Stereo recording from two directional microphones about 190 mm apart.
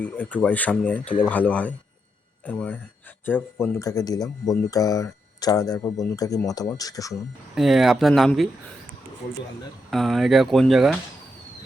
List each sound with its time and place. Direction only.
0.0 s speech: 10° left (ahead or behind)
7.1 s speech: centre (ahead or behind)
9.9 s speech: centre (ahead or behind)